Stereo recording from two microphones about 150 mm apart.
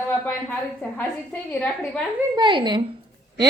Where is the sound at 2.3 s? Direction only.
30° right (ahead or behind).